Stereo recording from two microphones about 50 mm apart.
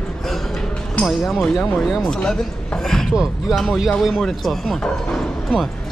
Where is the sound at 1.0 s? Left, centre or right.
Centre.